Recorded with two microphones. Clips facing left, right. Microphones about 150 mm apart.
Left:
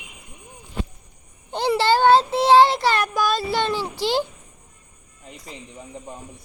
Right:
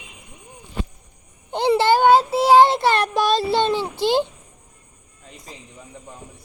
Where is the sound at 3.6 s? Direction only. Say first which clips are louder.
Right 3 dB; 20° right (ahead or behind).